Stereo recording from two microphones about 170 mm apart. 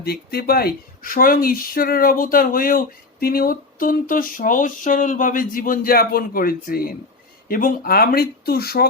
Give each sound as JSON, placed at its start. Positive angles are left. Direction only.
{"t": 0.0, "sound": "speech", "side_deg": 65}